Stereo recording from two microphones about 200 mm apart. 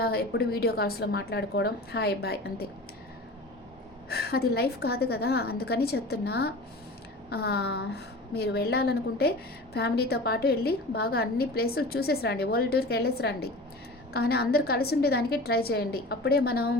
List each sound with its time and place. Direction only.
0.0 s a woman's voice: 50° left (ahead or behind)
4.1 s a woman's voice: 50° left (ahead or behind)